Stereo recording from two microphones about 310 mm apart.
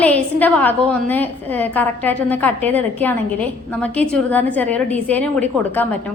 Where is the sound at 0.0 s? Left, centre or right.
Centre.